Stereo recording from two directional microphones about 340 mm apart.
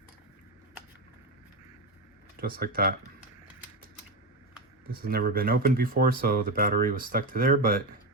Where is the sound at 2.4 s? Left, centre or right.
Right.